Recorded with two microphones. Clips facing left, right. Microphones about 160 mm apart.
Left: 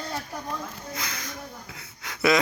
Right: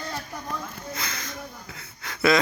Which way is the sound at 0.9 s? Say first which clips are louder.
Right 1 dB; 10° left (ahead or behind).